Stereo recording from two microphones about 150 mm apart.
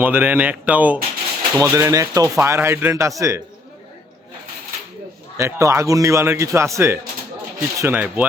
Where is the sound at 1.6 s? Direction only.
20° right (ahead or behind).